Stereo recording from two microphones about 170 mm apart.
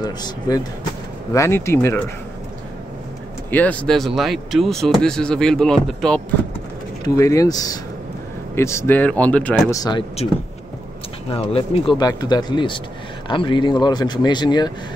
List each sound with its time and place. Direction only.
0.0 s speech: 25° left (ahead or behind)
3.4 s speech: 10° left (ahead or behind)
7.1 s speech: 20° left (ahead or behind)
9.8 s speech: 25° left (ahead or behind)
11.2 s speech: 35° left (ahead or behind)